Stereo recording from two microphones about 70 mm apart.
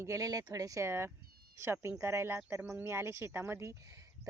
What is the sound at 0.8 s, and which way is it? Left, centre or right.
Speech, right.